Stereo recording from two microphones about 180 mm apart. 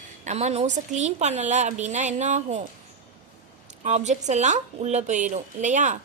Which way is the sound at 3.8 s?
40° right (ahead or behind).